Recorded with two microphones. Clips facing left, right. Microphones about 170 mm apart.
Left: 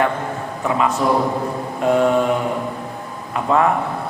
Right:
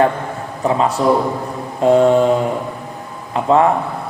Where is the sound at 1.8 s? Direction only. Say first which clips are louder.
Right 5 dB; 30° right (ahead or behind).